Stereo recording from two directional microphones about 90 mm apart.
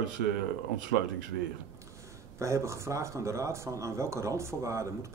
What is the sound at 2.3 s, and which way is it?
A man's voice, 35° right (ahead or behind).